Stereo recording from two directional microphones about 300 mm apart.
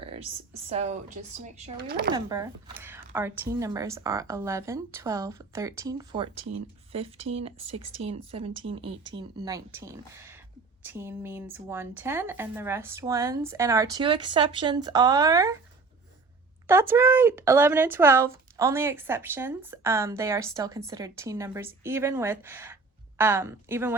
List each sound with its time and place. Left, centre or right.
0.0 s a sound: centre
0.7 s speech: right
2.1 s speech: centre
16.6 s speech: centre